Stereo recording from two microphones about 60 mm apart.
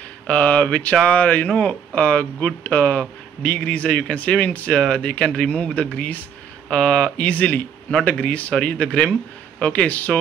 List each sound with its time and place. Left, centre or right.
0.3 s speech: left